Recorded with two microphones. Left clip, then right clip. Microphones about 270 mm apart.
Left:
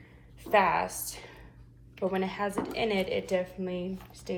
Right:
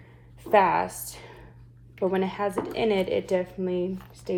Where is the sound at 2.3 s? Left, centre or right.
Right.